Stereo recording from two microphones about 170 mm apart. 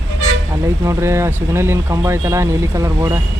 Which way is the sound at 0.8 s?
15° right (ahead or behind).